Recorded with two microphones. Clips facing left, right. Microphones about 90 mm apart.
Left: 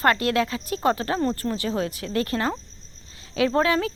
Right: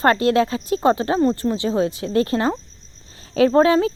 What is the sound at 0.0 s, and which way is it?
Speech, 25° right (ahead or behind).